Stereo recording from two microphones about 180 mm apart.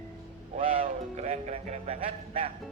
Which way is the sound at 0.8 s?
40° right (ahead or behind).